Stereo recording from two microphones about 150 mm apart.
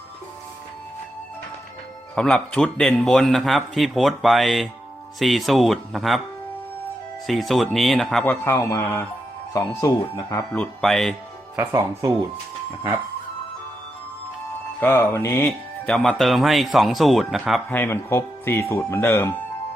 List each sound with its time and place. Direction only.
2.1 s speech: 5° left (ahead or behind)
7.3 s speech: centre (ahead or behind)
8.2 s speech: 15° left (ahead or behind)
10.5 s speech: 5° left (ahead or behind)
11.5 s speech: 20° right (ahead or behind)
14.8 s speech: 15° left (ahead or behind)
15.9 s speech: 5° left (ahead or behind)
17.7 s speech: 15° left (ahead or behind)